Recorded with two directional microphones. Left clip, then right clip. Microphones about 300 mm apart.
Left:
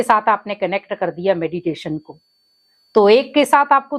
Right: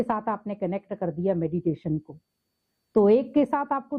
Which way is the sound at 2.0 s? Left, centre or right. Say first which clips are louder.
Left 5 dB; left.